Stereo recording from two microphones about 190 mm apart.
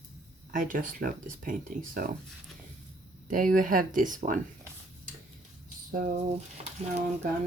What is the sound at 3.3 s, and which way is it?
Speech, 45° right (ahead or behind).